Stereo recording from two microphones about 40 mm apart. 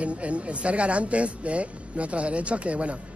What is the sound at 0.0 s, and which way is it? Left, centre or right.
Speech, right.